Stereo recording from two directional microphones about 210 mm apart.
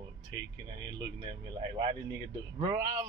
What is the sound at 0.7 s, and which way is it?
Speech, 20° right (ahead or behind).